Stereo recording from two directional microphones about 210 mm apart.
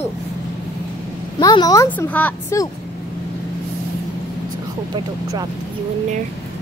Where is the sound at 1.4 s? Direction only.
15° left (ahead or behind).